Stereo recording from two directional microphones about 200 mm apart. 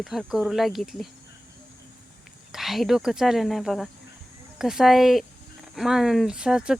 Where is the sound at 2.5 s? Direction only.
Centre (ahead or behind).